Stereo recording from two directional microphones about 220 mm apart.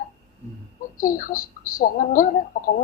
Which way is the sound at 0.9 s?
40° left (ahead or behind).